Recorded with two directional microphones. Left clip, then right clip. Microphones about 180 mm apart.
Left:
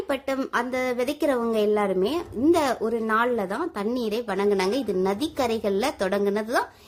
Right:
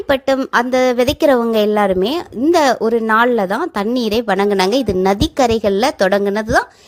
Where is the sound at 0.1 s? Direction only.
35° right (ahead or behind).